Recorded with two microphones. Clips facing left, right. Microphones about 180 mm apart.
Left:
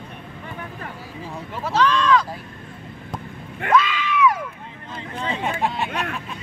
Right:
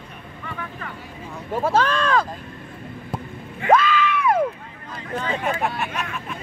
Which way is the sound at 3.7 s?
50° right (ahead or behind).